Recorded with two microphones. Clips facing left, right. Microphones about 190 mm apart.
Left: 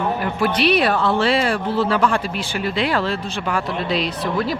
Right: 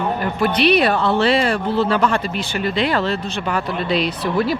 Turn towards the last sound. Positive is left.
turn(degrees=0)  # may be behind; listen again after turning